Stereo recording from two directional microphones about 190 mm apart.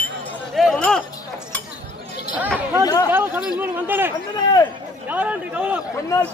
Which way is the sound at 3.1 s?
5° right (ahead or behind).